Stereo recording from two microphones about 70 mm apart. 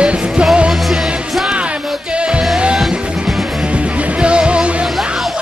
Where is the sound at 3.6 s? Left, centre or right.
Centre.